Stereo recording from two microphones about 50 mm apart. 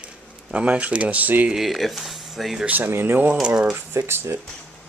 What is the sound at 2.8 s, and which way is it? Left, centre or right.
Speech, right.